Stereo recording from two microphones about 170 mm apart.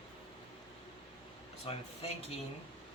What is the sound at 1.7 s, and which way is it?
Speech, 35° left (ahead or behind).